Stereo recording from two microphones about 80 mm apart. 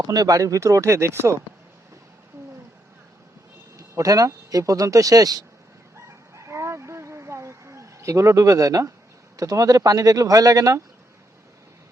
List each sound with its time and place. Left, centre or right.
0.0 s speech: right
3.8 s speech: right
6.3 s a sound: right
9.4 s speech: right